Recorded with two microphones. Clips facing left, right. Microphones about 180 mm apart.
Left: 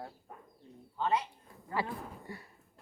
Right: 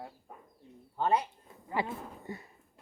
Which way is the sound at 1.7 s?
20° right (ahead or behind).